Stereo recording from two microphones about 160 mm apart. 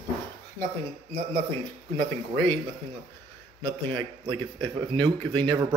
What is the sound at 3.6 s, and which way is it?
A man's voice, 30° right (ahead or behind).